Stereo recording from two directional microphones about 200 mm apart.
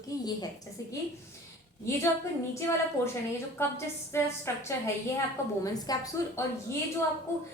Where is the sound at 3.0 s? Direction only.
15° left (ahead or behind).